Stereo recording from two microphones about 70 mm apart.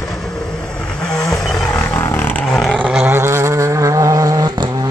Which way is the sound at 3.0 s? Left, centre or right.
Right.